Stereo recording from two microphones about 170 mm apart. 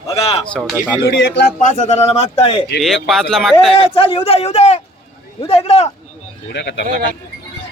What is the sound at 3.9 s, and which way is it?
A man's voice, 35° left (ahead or behind).